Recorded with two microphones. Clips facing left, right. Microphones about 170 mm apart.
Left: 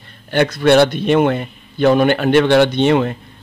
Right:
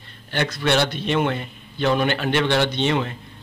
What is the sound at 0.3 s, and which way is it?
Speech, 50° left (ahead or behind).